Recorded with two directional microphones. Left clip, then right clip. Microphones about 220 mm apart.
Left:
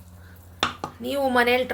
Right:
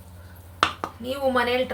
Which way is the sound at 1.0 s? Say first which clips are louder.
Left 2 dB; 40° left (ahead or behind).